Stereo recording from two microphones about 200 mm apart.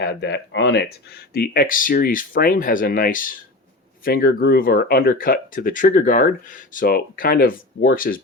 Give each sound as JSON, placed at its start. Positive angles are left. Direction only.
{"t": 0.0, "sound": "speech", "side_deg": 60}